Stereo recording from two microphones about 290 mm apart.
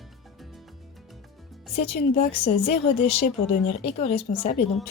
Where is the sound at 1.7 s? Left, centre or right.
Left.